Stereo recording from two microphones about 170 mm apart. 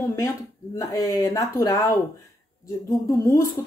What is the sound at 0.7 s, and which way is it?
Speech, 20° left (ahead or behind).